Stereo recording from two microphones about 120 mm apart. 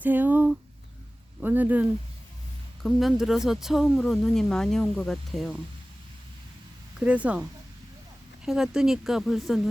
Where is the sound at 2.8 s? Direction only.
Centre (ahead or behind).